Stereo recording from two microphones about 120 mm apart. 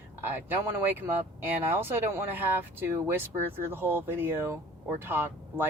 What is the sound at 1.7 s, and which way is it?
Speech, 20° right (ahead or behind).